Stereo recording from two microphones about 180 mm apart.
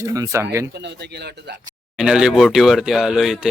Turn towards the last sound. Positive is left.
turn(degrees=0)  # may be behind; listen again after turning